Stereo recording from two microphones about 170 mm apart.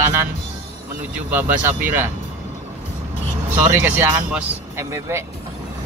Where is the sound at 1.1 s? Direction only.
10° right (ahead or behind).